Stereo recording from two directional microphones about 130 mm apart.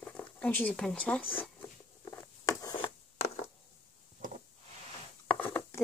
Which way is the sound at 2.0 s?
20° left (ahead or behind).